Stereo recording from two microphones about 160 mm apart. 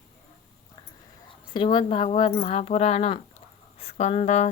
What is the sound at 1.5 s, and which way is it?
Speech, 30° left (ahead or behind).